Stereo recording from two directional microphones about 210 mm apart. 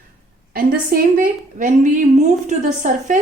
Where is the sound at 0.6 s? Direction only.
40° right (ahead or behind).